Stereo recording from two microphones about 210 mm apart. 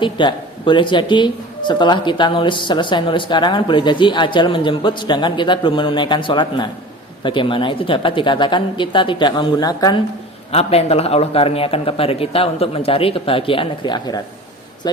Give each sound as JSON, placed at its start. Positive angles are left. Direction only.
{"t": 0.0, "sound": "speech", "side_deg": 20}
{"t": 10.5, "sound": "speech", "side_deg": 30}